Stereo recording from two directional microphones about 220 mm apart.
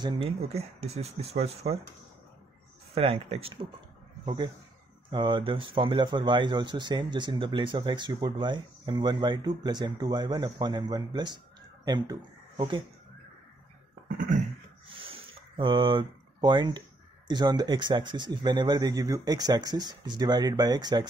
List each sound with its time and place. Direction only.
0.0 s speech: 25° right (ahead or behind)
2.9 s speech: 25° right (ahead or behind)
5.1 s speech: 20° right (ahead or behind)
14.0 s a sound: 35° right (ahead or behind)
14.9 s water: 25° right (ahead or behind)
15.5 s speech: 25° right (ahead or behind)